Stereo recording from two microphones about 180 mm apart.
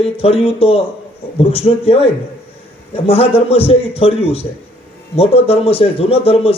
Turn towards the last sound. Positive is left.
turn(degrees=35)  # may be behind; listen again after turning